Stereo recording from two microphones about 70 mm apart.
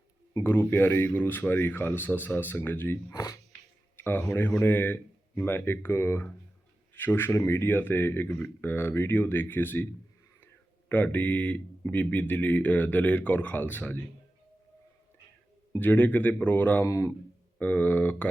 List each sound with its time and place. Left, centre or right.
0.4 s speech: left
3.1 s speech: left
3.9 s speech: left
8.7 s speech: left
15.8 s speech: left
16.8 s speech: left
17.6 s speech: left